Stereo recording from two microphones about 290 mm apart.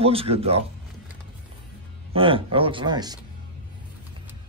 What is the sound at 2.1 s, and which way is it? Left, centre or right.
Speech, centre.